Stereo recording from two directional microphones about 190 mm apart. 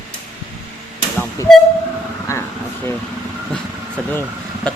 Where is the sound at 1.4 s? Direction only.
15° left (ahead or behind).